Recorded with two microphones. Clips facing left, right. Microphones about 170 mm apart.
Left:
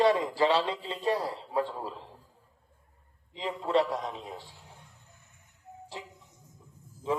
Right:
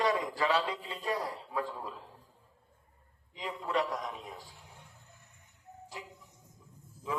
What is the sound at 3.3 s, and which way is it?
Mantra, 30° left (ahead or behind).